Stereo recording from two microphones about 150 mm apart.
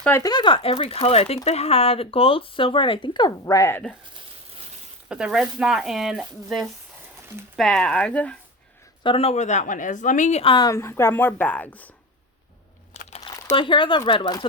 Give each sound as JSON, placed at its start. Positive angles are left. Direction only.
{"t": 0.2, "sound": "speech", "side_deg": 30}
{"t": 3.4, "sound": "a woman's voice", "side_deg": 15}
{"t": 5.0, "sound": "speech", "side_deg": -5}
{"t": 9.0, "sound": "a woman's voice", "side_deg": 40}
{"t": 10.4, "sound": "speech", "side_deg": 35}
{"t": 10.7, "sound": "a woman's voice", "side_deg": 20}
{"t": 12.9, "sound": "crumpling", "side_deg": 50}
{"t": 13.5, "sound": "speech", "side_deg": 35}